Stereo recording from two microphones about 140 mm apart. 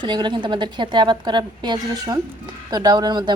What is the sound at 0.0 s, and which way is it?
Speech, 35° right (ahead or behind).